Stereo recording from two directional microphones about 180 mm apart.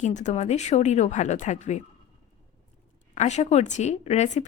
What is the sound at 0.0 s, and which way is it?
Speech, 40° left (ahead or behind).